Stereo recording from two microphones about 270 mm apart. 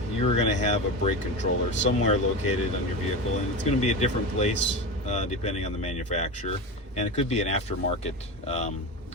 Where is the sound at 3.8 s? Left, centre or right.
Left.